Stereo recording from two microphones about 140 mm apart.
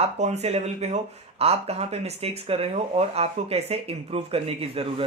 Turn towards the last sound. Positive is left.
turn(degrees=-40)  # may be behind; listen again after turning